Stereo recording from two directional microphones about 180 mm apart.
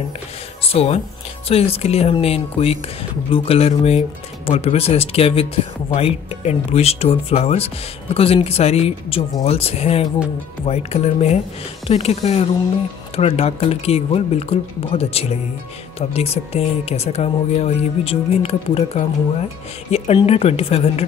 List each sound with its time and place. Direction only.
0.7 s speech: 35° left (ahead or behind)